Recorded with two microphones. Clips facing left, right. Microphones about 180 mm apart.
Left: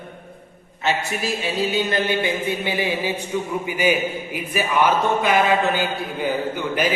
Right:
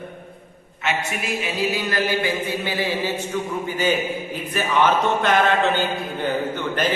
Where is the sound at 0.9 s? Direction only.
30° left (ahead or behind).